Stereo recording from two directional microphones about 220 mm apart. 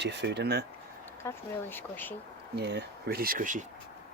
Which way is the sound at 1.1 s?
10° left (ahead or behind).